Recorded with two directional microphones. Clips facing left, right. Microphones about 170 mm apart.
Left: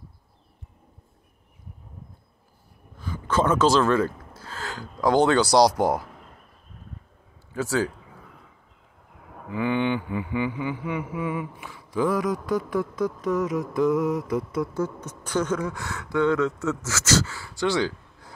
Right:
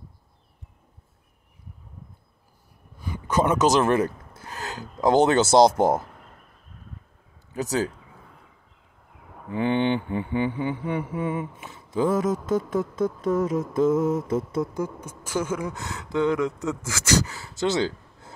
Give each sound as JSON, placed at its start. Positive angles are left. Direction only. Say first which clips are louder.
{"t": 3.0, "sound": "a man's voice", "louder": "even", "side_deg": -15}
{"t": 7.5, "sound": "mantra", "louder": "left 1 dB", "side_deg": -20}
{"t": 9.5, "sound": "mantra", "louder": "right 2 dB", "side_deg": -25}
{"t": 14.7, "sound": "speech", "louder": "left 2 dB", "side_deg": -10}
{"t": 15.7, "sound": "mantra", "louder": "even", "side_deg": -20}